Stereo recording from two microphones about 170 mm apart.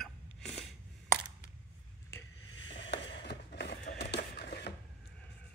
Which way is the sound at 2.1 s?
25° left (ahead or behind).